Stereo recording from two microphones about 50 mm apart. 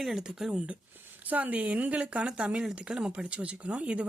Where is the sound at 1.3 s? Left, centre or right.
Right.